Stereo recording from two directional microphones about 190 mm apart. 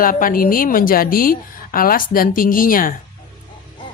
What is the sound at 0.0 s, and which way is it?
A woman's voice, 45° left (ahead or behind).